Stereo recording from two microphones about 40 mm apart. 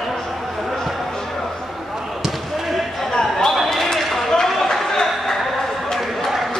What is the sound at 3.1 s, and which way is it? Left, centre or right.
Basketball bounce, centre.